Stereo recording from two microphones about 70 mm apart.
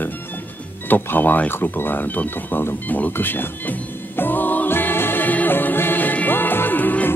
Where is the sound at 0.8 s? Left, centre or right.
Left.